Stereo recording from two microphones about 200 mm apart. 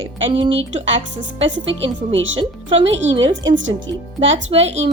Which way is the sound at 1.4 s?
70° right (ahead or behind).